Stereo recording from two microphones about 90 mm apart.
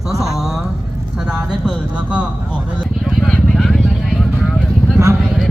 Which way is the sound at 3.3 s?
5° left (ahead or behind).